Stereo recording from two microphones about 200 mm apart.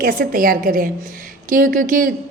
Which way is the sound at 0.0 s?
45° right (ahead or behind).